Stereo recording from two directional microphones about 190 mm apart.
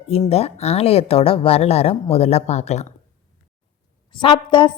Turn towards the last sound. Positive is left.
turn(degrees=25)  # may be behind; listen again after turning